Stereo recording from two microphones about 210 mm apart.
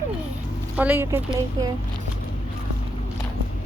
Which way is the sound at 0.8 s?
10° right (ahead or behind).